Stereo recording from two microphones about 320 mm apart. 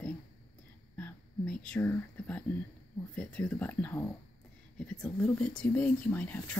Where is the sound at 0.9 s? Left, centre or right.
Centre.